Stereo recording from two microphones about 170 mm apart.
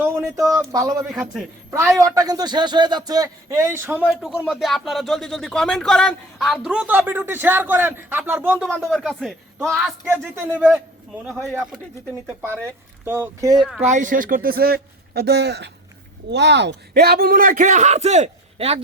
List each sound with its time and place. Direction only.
0.0 s a man's voice: 15° right (ahead or behind)
1.1 s speech: centre (ahead or behind)
2.1 s a man's voice: 20° right (ahead or behind)
4.0 s speech: centre (ahead or behind)
8.6 s speech: centre (ahead or behind)
10.1 s speech: 15° right (ahead or behind)
12.2 s speech: 15° right (ahead or behind)
13.6 s speech: centre (ahead or behind)
13.8 s speech: 50° right (ahead or behind); by 15.7 s 80° right
16.3 s a man's voice: 90° right; by 18.8 s 35° right (ahead or behind)